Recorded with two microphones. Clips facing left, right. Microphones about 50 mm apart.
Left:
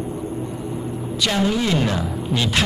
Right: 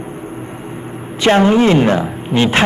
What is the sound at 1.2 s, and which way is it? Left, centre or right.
A woman's voice, right.